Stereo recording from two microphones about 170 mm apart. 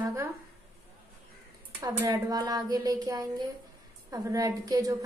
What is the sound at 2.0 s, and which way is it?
A woman's voice, 20° right (ahead or behind).